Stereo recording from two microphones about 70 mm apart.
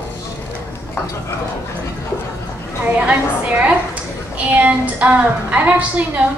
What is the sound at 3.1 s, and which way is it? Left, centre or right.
A woman's voice, centre.